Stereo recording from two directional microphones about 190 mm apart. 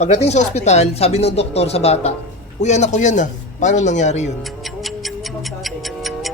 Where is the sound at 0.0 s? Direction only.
35° left (ahead or behind).